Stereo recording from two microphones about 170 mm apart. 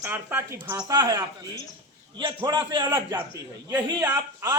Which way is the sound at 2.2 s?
25° right (ahead or behind).